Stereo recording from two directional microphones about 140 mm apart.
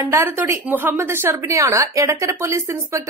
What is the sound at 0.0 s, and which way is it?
A woman's voice, 15° right (ahead or behind).